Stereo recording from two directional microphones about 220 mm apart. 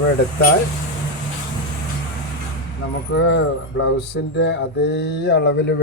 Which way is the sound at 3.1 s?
55° left (ahead or behind).